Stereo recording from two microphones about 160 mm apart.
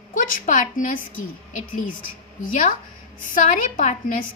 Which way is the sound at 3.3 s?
55° left (ahead or behind).